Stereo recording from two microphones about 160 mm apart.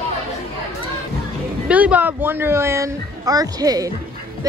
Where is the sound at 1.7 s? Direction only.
10° right (ahead or behind).